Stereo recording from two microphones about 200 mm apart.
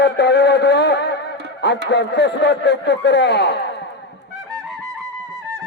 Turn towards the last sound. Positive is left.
turn(degrees=60)  # may be behind; listen again after turning